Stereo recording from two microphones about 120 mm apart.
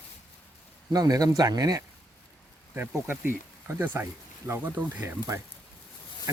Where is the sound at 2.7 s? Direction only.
15° right (ahead or behind).